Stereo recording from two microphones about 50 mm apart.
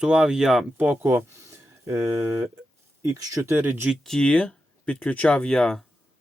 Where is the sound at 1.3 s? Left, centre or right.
Right.